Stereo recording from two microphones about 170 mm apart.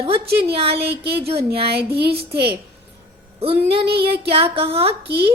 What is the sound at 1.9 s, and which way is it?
Speech, 70° right (ahead or behind).